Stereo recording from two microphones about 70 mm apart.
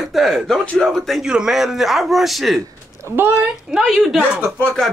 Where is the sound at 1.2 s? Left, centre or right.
Centre.